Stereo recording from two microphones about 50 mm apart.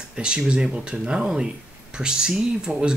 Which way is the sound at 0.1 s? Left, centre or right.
Centre.